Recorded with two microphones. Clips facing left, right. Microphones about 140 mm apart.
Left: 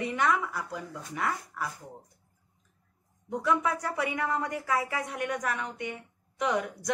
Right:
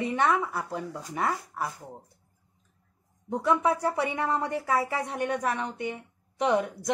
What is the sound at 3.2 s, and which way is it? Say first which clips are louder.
A woman's voice: right 3 dB; 30° right (ahead or behind).